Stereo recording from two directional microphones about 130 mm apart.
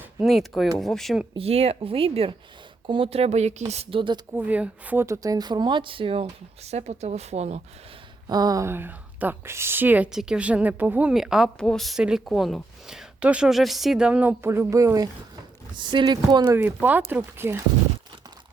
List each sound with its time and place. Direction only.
0.3 s speech: centre (ahead or behind)
1.4 s speech: 50° right (ahead or behind)
4.3 s speech: 15° right (ahead or behind); by 7.6 s 55° right (ahead or behind)
8.3 s speech: 30° right (ahead or behind)
16.6 s speech: 15° right (ahead or behind)